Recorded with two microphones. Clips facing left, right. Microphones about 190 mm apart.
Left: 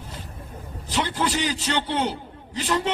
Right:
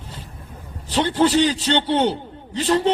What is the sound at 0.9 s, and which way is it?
A man's voice, 30° right (ahead or behind).